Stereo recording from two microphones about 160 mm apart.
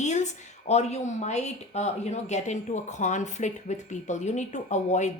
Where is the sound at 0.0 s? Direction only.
50° left (ahead or behind).